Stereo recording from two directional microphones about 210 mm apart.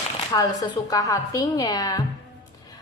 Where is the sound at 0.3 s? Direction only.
15° left (ahead or behind).